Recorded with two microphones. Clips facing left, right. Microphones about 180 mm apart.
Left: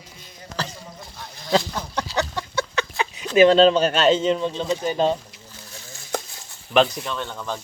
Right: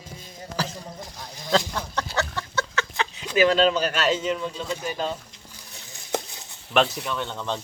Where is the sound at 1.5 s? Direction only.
15° left (ahead or behind).